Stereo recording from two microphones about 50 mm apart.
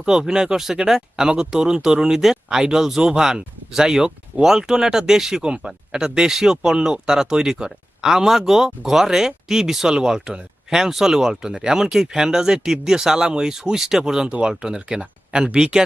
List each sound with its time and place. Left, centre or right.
0.0 s speech: centre